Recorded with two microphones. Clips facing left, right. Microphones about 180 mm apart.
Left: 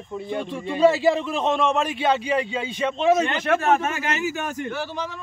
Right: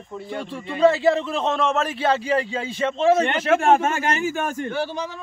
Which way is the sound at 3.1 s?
30° right (ahead or behind).